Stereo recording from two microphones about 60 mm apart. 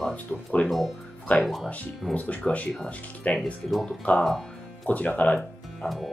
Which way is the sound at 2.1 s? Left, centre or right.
Left.